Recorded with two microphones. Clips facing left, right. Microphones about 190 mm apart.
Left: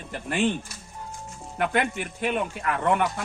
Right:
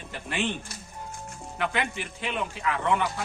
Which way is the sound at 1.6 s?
50° left (ahead or behind).